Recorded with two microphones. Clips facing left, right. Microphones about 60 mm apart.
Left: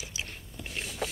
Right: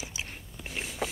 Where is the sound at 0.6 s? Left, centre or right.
Centre.